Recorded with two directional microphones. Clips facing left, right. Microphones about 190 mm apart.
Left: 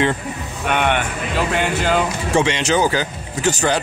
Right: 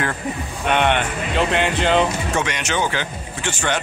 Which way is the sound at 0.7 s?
10° left (ahead or behind).